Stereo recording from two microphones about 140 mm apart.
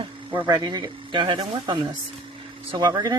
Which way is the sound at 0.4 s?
30° right (ahead or behind).